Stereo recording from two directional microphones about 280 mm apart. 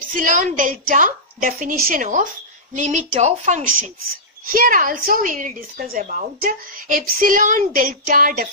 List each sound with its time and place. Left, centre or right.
0.1 s speech: right